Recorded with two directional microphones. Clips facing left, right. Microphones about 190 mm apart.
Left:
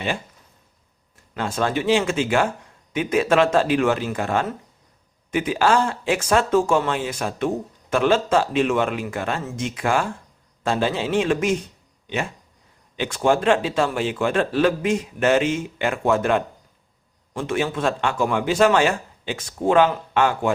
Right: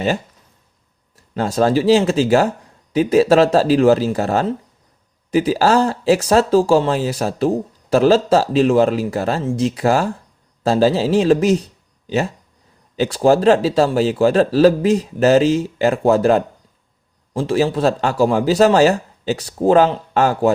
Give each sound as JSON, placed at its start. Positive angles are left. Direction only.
{"t": 1.3, "sound": "a man's voice", "side_deg": -40}